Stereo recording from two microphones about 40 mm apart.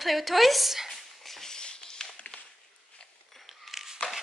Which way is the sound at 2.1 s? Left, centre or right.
Left.